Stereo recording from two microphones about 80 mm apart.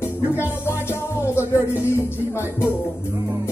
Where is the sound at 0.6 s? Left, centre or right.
Left.